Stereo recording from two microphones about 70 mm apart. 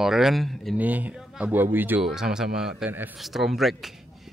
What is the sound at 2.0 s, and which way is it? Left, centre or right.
Speech, centre.